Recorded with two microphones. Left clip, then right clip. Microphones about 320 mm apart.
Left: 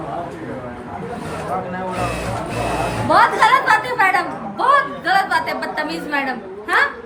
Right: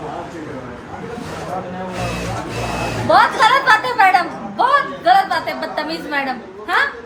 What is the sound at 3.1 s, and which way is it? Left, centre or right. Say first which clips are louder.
A woman's voice: right 1 dB; centre.